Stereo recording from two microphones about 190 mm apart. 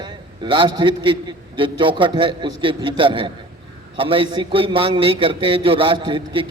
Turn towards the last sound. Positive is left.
turn(degrees=-25)  # may be behind; listen again after turning